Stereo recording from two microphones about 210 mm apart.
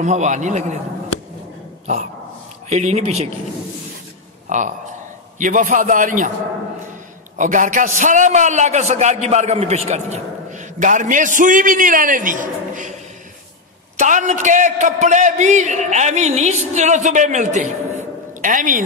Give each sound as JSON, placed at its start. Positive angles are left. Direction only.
{"t": 0.0, "sound": "a man's voice", "side_deg": -35}
{"t": 2.7, "sound": "a man's voice", "side_deg": -30}
{"t": 4.5, "sound": "a man's voice", "side_deg": -35}
{"t": 7.3, "sound": "a man's voice", "side_deg": -40}
{"t": 13.9, "sound": "a man's voice", "side_deg": -35}